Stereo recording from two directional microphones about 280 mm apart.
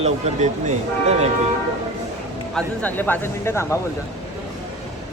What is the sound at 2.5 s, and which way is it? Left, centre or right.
A man's voice, centre.